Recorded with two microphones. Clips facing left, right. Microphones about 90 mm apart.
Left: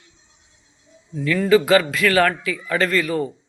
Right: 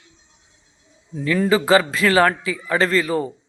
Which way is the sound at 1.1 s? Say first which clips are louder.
Left 2 dB; 30° right (ahead or behind).